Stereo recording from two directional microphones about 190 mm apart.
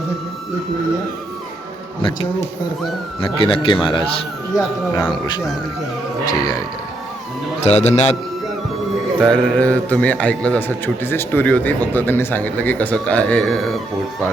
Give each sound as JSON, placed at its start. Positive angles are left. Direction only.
{"t": 3.2, "sound": "speech", "side_deg": 30}
{"t": 7.6, "sound": "a man's voice", "side_deg": 35}
{"t": 9.1, "sound": "a man's voice", "side_deg": 5}